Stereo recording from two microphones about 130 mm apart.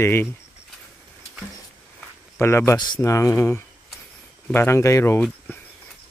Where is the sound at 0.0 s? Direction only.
15° left (ahead or behind).